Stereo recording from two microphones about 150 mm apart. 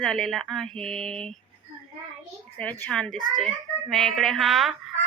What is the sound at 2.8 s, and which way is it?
Speech, 5° left (ahead or behind).